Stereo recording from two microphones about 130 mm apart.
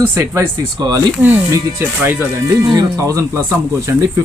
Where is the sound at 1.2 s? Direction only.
15° right (ahead or behind).